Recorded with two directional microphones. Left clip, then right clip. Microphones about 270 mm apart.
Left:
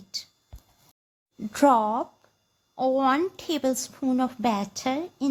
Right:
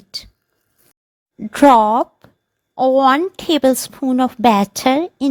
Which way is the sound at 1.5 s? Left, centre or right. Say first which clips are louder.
Right 10 dB; right.